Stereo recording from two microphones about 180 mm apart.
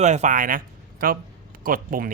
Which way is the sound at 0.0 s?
40° right (ahead or behind).